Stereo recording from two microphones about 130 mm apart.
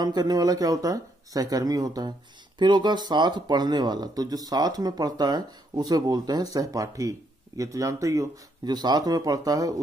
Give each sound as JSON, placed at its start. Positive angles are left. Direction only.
{"t": 0.0, "sound": "speech", "side_deg": -30}